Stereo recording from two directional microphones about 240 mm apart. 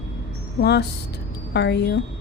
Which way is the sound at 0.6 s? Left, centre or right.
Left.